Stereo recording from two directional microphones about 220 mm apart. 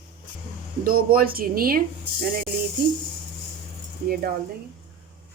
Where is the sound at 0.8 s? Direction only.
40° right (ahead or behind).